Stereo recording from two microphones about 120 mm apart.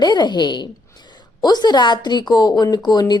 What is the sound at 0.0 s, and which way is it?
A woman's voice, 40° left (ahead or behind).